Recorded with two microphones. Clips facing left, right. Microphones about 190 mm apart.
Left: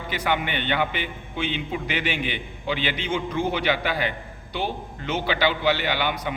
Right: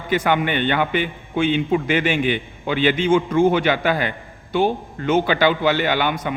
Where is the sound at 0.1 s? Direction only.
50° right (ahead or behind).